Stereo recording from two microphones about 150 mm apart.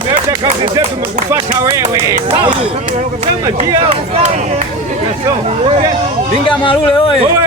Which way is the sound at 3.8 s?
45° right (ahead or behind).